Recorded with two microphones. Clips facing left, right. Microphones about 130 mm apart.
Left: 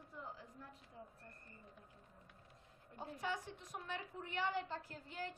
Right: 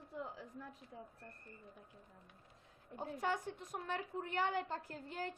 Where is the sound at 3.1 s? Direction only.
50° right (ahead or behind).